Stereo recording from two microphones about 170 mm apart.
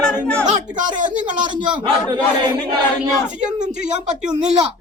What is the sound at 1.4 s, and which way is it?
A man's voice, 25° right (ahead or behind).